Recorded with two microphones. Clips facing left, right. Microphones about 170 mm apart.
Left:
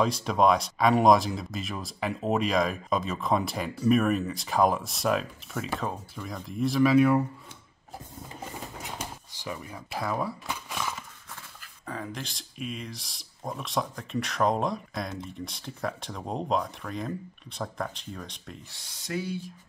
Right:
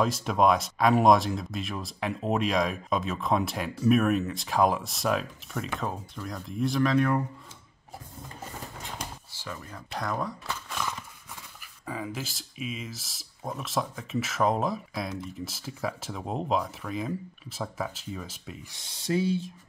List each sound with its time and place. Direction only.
0.0 s speech: centre (ahead or behind)
9.3 s speech: 15° left (ahead or behind)
11.8 s speech: 5° right (ahead or behind)
18.7 s speech: 25° right (ahead or behind)